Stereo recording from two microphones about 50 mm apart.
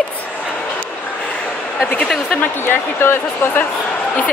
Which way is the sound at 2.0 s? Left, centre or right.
Centre.